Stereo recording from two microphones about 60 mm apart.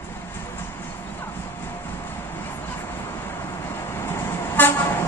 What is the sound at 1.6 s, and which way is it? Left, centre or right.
Vehicle, left.